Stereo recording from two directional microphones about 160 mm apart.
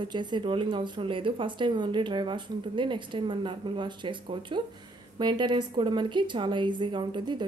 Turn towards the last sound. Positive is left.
turn(degrees=-30)  # may be behind; listen again after turning